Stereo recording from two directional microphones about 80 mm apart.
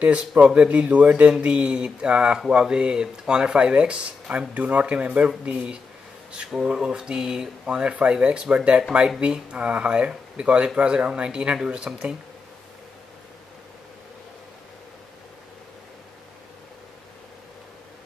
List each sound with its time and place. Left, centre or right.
0.0 s speech: centre